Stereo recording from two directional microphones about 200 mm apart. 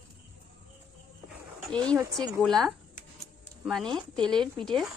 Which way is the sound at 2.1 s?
Centre (ahead or behind).